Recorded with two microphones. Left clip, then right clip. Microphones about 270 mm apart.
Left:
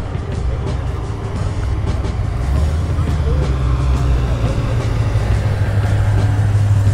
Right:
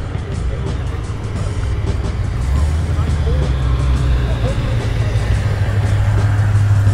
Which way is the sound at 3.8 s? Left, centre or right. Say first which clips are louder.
Left 1 dB; left.